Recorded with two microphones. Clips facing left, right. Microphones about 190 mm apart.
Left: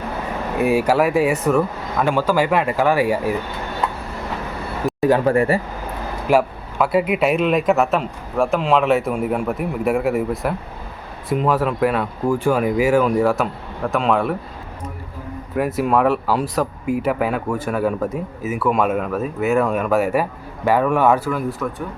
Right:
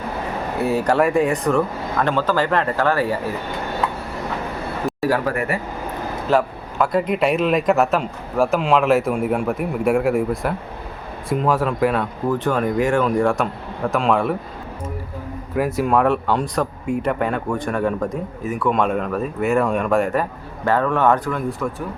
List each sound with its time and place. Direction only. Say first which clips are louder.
0.6 s speech: left 1 dB; 10° left (ahead or behind)
4.9 s speech: left 6 dB; 20° left (ahead or behind)
6.3 s speech: left 2 dB; 10° left (ahead or behind)
15.5 s speech: even; centre (ahead or behind)